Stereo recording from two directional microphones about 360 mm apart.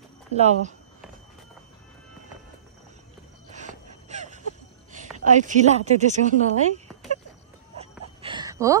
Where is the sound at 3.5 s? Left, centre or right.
Centre.